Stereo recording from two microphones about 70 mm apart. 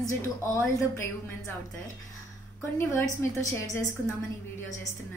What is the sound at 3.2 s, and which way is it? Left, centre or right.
Speech, left.